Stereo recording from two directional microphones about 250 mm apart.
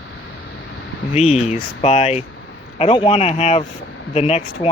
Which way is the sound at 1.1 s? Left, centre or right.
Left.